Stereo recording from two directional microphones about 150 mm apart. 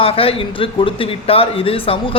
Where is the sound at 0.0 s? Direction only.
40° left (ahead or behind).